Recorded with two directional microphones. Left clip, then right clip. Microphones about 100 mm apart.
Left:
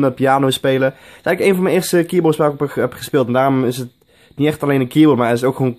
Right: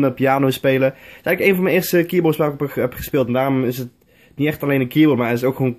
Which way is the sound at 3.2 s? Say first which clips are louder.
Left 3 dB; 45° left (ahead or behind).